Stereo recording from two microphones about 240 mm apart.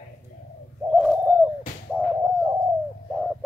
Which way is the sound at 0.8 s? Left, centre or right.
Centre.